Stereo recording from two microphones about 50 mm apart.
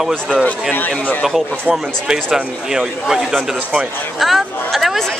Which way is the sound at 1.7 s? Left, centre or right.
Centre.